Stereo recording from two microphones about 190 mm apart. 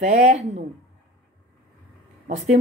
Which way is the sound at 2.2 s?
40° right (ahead or behind).